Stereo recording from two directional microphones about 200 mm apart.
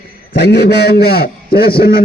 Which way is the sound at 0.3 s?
55° left (ahead or behind).